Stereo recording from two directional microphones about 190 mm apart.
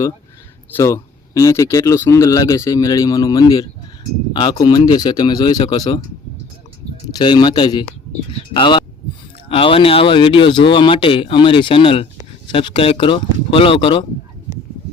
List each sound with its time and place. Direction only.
0.7 s speech: 15° left (ahead or behind)
7.2 s speech: 25° left (ahead or behind)